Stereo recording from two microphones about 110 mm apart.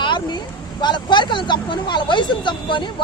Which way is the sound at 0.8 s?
45° left (ahead or behind).